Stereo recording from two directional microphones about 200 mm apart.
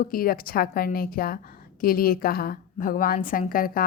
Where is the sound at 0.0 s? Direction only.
45° left (ahead or behind).